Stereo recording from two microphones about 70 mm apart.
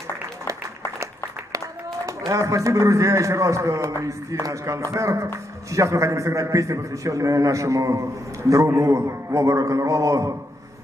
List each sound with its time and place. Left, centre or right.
2.0 s a man's voice: right